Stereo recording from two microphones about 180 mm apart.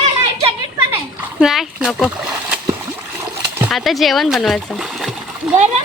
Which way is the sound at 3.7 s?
Centre (ahead or behind).